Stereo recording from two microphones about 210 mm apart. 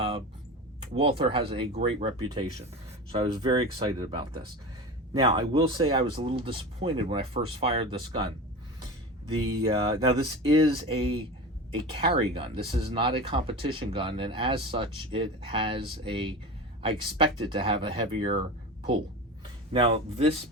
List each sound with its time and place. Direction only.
0.9 s speech: 25° right (ahead or behind)
5.2 s speech: 25° right (ahead or behind)
9.6 s speech: 25° right (ahead or behind)
19.7 s speech: 30° right (ahead or behind)